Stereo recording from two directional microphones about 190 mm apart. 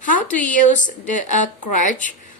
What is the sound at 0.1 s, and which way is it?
Speech, 45° left (ahead or behind).